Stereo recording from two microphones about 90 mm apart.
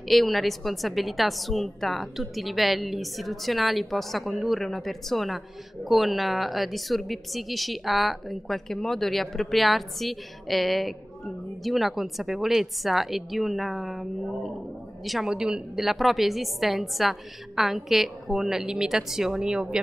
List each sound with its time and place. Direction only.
0.1 s a woman's voice: centre (ahead or behind)